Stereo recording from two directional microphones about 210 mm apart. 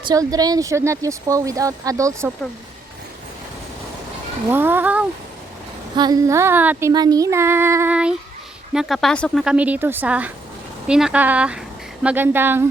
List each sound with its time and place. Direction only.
0.1 s speech: 15° right (ahead or behind)
4.5 s speech: 10° right (ahead or behind)